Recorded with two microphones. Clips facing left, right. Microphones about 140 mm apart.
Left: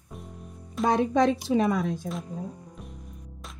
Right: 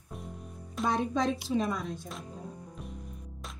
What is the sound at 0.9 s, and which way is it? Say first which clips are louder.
Speech: left 7 dB; 70° left (ahead or behind).